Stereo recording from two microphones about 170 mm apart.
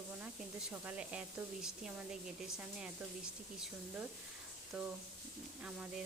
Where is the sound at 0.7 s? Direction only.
10° right (ahead or behind).